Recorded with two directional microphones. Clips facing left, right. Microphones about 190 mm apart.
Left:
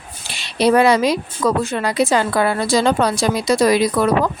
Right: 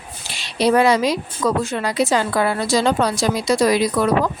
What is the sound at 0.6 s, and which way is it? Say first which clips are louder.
A woman's voice: left 2 dB; 60° left (ahead or behind).